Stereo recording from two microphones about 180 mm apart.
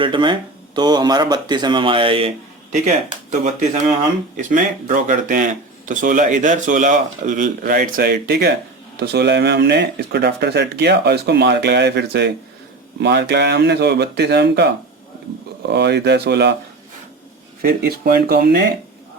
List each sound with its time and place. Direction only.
0.0 s speech: 25° right (ahead or behind)
4.4 s speech: 45° right (ahead or behind); by 16.6 s 65° right (ahead or behind)
17.6 s speech: 55° right (ahead or behind)